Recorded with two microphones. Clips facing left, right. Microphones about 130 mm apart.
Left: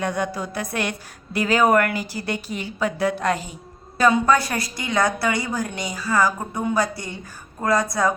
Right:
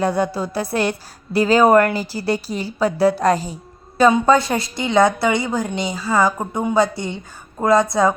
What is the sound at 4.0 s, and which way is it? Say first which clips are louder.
A woman's voice: right 4 dB; 25° right (ahead or behind).